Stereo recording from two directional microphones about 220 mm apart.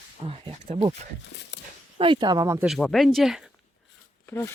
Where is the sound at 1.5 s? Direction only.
55° left (ahead or behind).